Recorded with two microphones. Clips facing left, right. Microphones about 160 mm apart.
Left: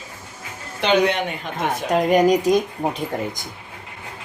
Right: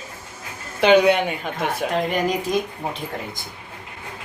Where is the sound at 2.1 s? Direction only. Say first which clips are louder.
Left 7 dB; 40° left (ahead or behind).